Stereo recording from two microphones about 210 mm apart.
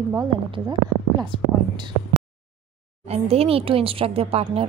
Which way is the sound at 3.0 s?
30° right (ahead or behind).